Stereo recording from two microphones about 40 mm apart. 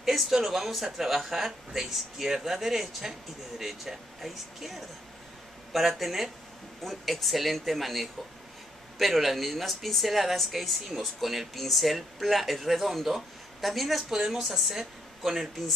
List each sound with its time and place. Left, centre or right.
0.0 s a woman's voice: centre